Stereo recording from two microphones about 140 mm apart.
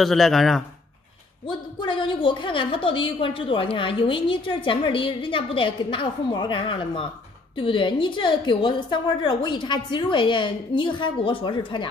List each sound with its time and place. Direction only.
0.0 s a man's voice: centre (ahead or behind)
1.8 s a woman's voice: 35° left (ahead or behind)